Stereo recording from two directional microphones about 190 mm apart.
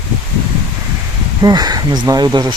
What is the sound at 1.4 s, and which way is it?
Speech, 20° right (ahead or behind).